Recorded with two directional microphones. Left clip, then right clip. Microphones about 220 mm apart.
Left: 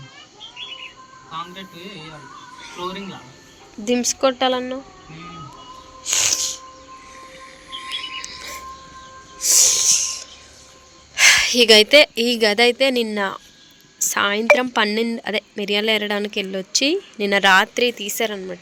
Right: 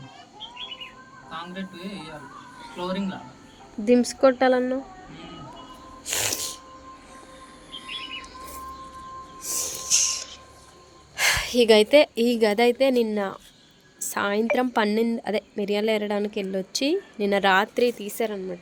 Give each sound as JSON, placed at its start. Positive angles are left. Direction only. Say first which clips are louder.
{"t": 3.8, "sound": "speech", "louder": "even", "side_deg": -15}
{"t": 6.1, "sound": "snort", "louder": "left 8 dB", "side_deg": -25}
{"t": 7.9, "sound": "music", "louder": "left 6 dB", "side_deg": -10}
{"t": 8.2, "sound": "a sound", "louder": "left 7 dB", "side_deg": 10}
{"t": 9.4, "sound": "snort", "louder": "left 16 dB", "side_deg": 10}
{"t": 11.1, "sound": "a woman's voice", "louder": "left 9 dB", "side_deg": -15}